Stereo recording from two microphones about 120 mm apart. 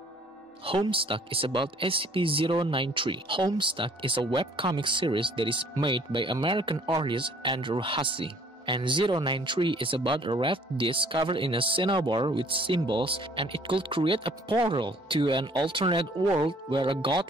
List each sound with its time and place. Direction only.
0.7 s speech: 45° right (ahead or behind)